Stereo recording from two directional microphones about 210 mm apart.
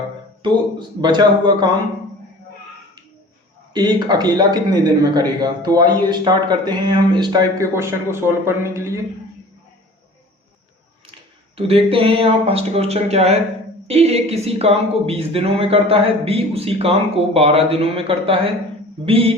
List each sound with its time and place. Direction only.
0.4 s a woman's voice: 20° right (ahead or behind)
3.8 s a woman's voice: 20° right (ahead or behind)
11.5 s a woman's voice: 25° right (ahead or behind)